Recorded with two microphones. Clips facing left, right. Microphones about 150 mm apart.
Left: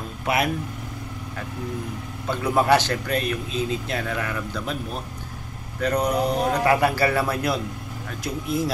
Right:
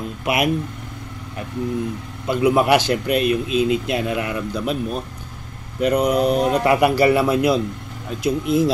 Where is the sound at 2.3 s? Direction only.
15° right (ahead or behind).